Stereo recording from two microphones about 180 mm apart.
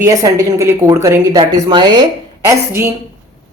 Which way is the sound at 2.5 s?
15° right (ahead or behind).